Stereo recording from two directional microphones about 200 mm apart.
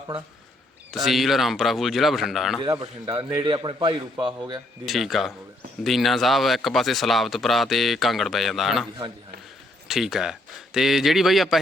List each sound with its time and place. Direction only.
0.9 s speech: centre (ahead or behind)
2.8 s a man's voice: 25° right (ahead or behind)
4.9 s speech: centre (ahead or behind)
9.9 s speech: centre (ahead or behind)